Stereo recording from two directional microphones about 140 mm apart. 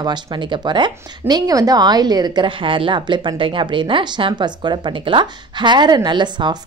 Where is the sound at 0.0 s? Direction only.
30° right (ahead or behind).